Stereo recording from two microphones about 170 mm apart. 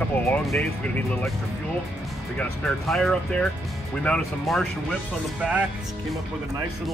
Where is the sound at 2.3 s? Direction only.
5° left (ahead or behind).